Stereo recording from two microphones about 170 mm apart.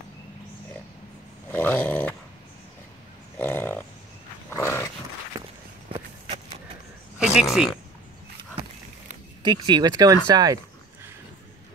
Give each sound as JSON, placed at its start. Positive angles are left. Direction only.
{"t": 1.5, "sound": "snoring", "side_deg": 10}
{"t": 3.3, "sound": "grunt", "side_deg": 10}
{"t": 4.5, "sound": "dog", "side_deg": 15}
{"t": 7.2, "sound": "a sound", "side_deg": -5}
{"t": 9.4, "sound": "speech", "side_deg": -25}